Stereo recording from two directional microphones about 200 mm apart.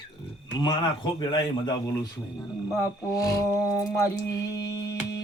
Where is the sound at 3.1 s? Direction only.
15° left (ahead or behind).